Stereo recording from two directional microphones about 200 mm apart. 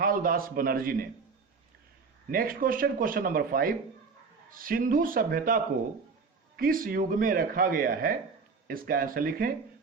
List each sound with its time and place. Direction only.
0.0 s speech: 45° right (ahead or behind)
2.3 s speech: 45° right (ahead or behind)
6.6 s speech: 45° right (ahead or behind)